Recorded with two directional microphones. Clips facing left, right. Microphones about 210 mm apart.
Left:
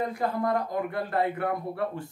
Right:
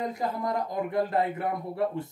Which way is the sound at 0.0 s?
20° right (ahead or behind).